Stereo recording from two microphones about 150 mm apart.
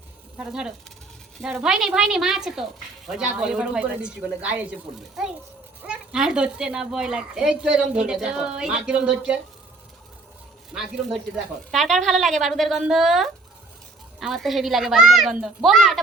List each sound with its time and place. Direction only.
0.3 s speech: 5° right (ahead or behind)
10.8 s speech: 5° right (ahead or behind)